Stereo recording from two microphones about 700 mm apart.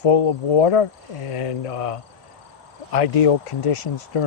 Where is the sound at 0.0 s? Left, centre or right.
Left.